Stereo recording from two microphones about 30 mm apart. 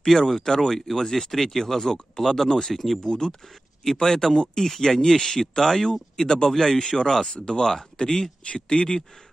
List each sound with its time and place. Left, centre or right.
0.0 s speech: centre
3.1 s speech: left
7.3 s speech: left
8.5 s speech: left